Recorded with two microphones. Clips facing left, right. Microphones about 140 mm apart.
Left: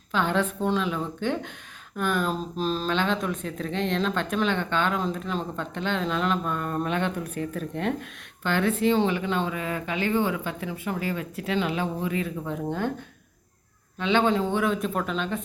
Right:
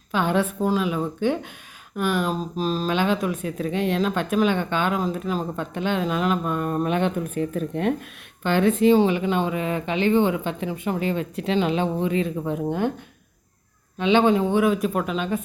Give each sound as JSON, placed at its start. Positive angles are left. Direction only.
{"t": 0.1, "sound": "speech", "side_deg": -15}
{"t": 14.0, "sound": "speech", "side_deg": -15}